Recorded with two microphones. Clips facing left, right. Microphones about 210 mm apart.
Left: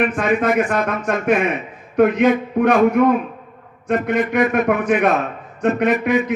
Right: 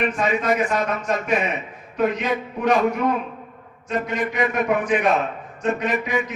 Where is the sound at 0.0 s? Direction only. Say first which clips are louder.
Left 4 dB; 50° left (ahead or behind).